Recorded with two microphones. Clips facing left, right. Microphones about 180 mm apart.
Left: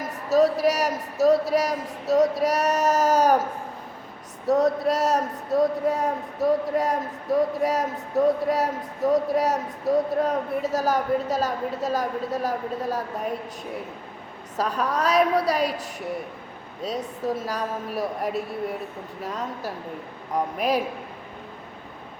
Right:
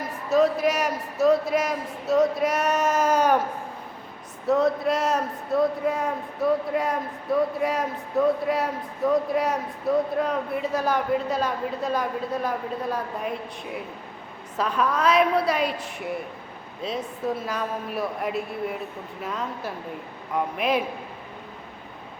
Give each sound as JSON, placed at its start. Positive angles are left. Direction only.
{"t": 0.0, "sound": "a man's voice", "side_deg": 40}
{"t": 4.4, "sound": "a man's voice", "side_deg": 40}
{"t": 14.5, "sound": "a man's voice", "side_deg": 40}